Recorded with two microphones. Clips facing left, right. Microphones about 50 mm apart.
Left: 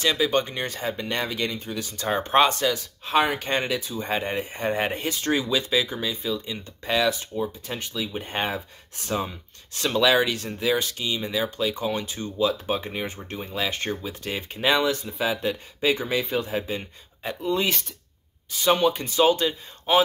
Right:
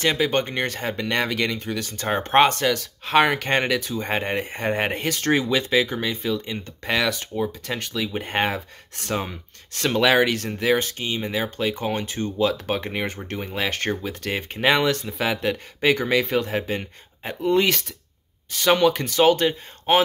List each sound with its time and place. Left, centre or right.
0.0 s speech: right
1.9 s speech: right
2.8 s speech: right
5.0 s speech: right
7.6 s speech: right
14.3 s speech: right
14.9 s speech: right
18.5 s speech: right